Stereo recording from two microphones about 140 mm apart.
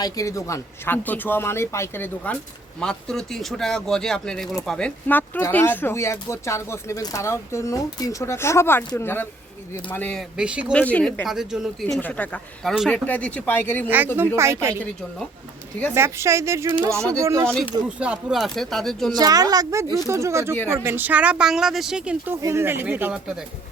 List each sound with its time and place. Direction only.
0.0 s speech: 25° left (ahead or behind)
10.2 s speech: 5° right (ahead or behind)
10.7 s speech: 10° left (ahead or behind)
11.3 s speech: 5° right (ahead or behind)
11.9 s speech: 10° left (ahead or behind)
13.8 s a woman's voice: 15° right (ahead or behind)
16.0 s a woman's voice: 20° right (ahead or behind)
17.8 s speech: 10° right (ahead or behind)
19.1 s a woman's voice: 25° right (ahead or behind); by 22.4 s 10° right (ahead or behind)
22.4 s speech: 20° right (ahead or behind)